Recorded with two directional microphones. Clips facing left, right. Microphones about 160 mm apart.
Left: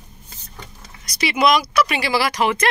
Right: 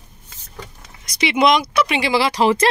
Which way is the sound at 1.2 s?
20° right (ahead or behind).